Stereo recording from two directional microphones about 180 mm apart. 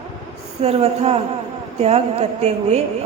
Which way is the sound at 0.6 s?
35° right (ahead or behind).